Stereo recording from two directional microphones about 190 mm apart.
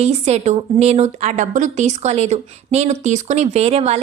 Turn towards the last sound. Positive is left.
turn(degrees=-35)  # may be behind; listen again after turning